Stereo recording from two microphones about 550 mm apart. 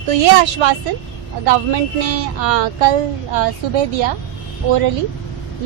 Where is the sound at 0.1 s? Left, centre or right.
Right.